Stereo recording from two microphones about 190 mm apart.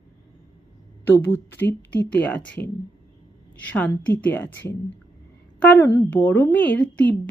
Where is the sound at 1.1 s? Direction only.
10° left (ahead or behind).